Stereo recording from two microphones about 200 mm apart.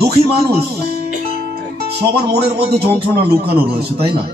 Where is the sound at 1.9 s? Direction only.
55° right (ahead or behind).